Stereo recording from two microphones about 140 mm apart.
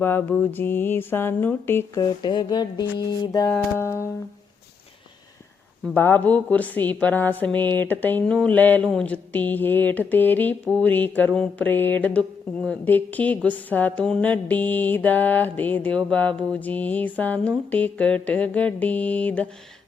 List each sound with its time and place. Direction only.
0.0 s a woman's voice: 15° left (ahead or behind)
2.0 s speech: 30° left (ahead or behind)
5.9 s a woman's voice: 15° left (ahead or behind)